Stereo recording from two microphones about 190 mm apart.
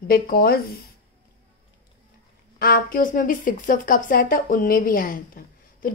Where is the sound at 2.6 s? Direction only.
45° left (ahead or behind).